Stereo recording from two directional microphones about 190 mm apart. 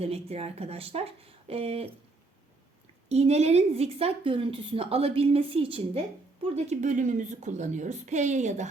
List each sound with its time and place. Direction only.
0.0 s a woman's voice: 30° right (ahead or behind)
3.1 s a woman's voice: 35° right (ahead or behind)